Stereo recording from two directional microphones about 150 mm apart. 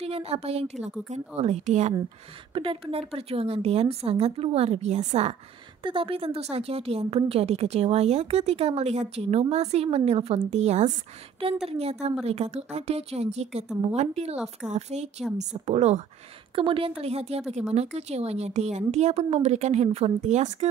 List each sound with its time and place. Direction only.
0.0 s a woman's voice: 40° right (ahead or behind)
2.5 s a woman's voice: 35° right (ahead or behind)
5.8 s a woman's voice: 35° right (ahead or behind); by 20.5 s 50° right (ahead or behind)